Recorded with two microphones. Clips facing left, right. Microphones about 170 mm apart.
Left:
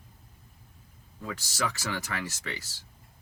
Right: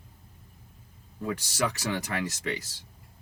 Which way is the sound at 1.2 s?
15° right (ahead or behind).